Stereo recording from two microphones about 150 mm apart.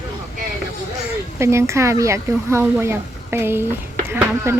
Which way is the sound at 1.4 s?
20° right (ahead or behind).